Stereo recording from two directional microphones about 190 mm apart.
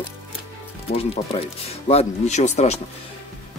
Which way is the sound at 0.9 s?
30° left (ahead or behind).